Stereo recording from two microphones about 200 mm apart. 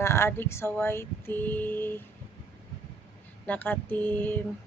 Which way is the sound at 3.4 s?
10° left (ahead or behind).